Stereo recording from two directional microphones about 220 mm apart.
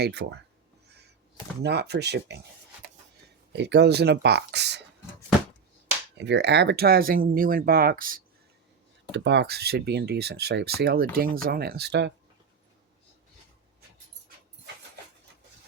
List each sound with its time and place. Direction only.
0.0 s speech: 50° right (ahead or behind)
1.6 s speech: 50° right (ahead or behind)
3.5 s speech: 50° right (ahead or behind)
6.1 s speech: 50° right (ahead or behind)
9.1 s speech: 50° right (ahead or behind)